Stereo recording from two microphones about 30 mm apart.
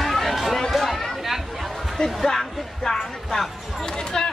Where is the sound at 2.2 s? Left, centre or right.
Centre.